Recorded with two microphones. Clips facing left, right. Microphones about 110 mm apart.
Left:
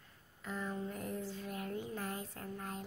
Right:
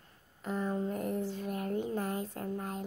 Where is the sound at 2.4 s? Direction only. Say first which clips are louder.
Right 7 dB; 30° right (ahead or behind).